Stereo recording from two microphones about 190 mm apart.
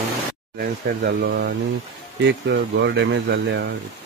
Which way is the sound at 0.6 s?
55° right (ahead or behind).